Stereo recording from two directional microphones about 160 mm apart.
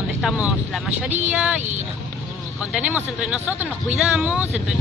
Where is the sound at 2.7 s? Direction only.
10° right (ahead or behind).